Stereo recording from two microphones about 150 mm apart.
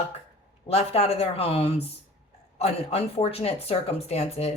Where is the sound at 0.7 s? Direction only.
45° left (ahead or behind).